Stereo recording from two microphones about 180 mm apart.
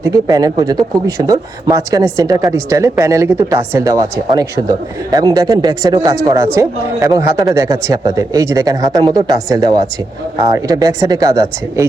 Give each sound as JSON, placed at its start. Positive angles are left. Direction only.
{"t": 0.0, "sound": "speech", "side_deg": -20}